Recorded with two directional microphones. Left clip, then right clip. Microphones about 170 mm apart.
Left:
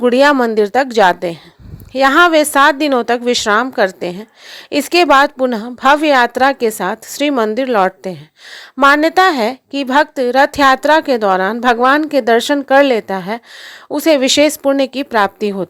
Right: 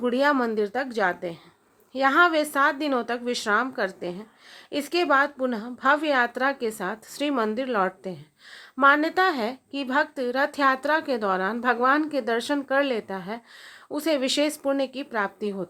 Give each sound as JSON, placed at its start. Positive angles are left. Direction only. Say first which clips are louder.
{"t": 0.0, "sound": "a woman's voice", "louder": "left 12 dB", "side_deg": 50}